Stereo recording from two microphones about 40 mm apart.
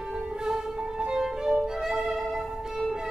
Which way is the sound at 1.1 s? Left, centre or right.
Centre.